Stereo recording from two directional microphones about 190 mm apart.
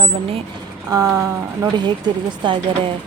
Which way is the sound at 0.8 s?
20° right (ahead or behind).